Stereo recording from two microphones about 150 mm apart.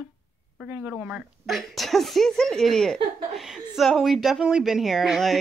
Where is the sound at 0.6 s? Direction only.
15° right (ahead or behind).